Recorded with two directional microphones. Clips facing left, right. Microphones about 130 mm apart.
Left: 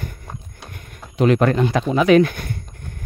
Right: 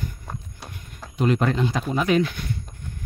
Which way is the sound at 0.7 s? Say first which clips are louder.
Left 2 dB; 60° left (ahead or behind).